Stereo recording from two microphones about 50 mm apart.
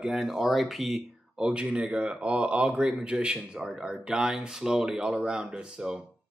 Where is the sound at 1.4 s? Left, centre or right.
Centre.